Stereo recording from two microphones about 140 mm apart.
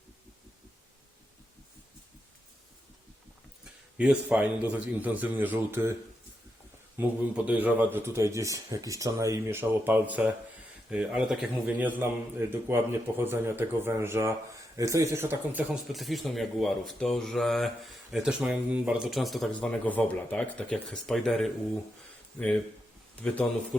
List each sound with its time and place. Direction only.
3.6 s a man's voice: 5° right (ahead or behind)
15.9 s speech: centre (ahead or behind)
23.2 s speech: 10° left (ahead or behind)